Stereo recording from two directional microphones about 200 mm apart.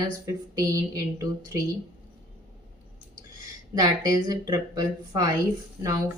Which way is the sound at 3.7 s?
20° right (ahead or behind).